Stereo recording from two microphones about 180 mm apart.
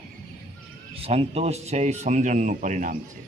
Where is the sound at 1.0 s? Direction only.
35° right (ahead or behind).